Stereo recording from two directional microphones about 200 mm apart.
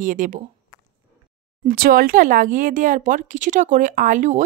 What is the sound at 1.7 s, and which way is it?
Speech, 45° right (ahead or behind).